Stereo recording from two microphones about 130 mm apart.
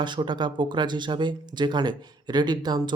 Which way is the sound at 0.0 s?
35° right (ahead or behind).